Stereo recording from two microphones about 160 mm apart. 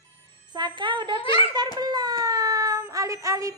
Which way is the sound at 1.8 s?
25° right (ahead or behind).